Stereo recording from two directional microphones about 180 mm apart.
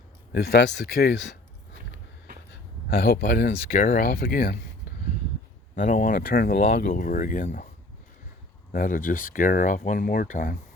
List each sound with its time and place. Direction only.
0.3 s speech: 65° left (ahead or behind)
2.9 s speech: 60° left (ahead or behind)
5.7 s speech: 45° left (ahead or behind)
8.7 s speech: 50° left (ahead or behind)